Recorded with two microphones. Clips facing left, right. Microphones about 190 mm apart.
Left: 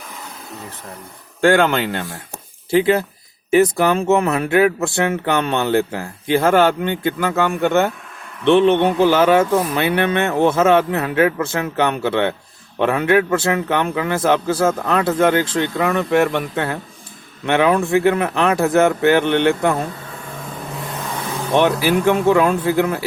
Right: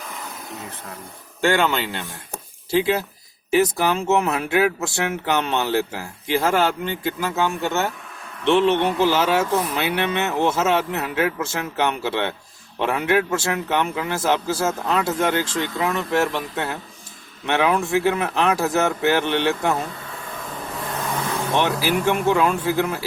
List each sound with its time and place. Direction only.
1.4 s speech: 55° left (ahead or behind)
21.5 s speech: 55° left (ahead or behind)